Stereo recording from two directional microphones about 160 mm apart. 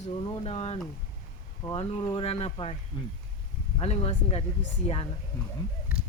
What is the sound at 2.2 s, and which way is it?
Speech, 40° left (ahead or behind).